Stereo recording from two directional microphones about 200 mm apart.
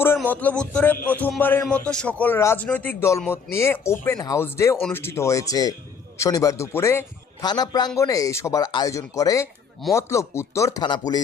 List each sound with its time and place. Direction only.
0.2 s a man's voice: 5° left (ahead or behind)